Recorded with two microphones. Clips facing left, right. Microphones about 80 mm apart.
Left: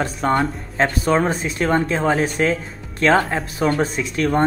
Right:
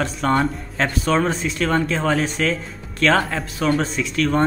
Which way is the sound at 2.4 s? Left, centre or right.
Left.